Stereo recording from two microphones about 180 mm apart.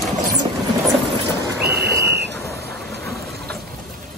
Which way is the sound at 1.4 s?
15° right (ahead or behind).